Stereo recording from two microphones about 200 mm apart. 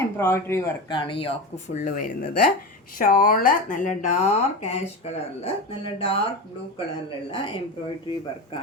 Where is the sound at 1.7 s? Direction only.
40° left (ahead or behind).